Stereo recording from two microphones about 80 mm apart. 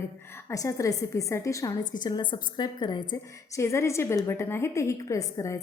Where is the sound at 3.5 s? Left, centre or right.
Left.